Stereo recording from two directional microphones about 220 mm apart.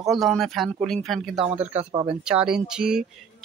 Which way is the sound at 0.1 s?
Centre (ahead or behind).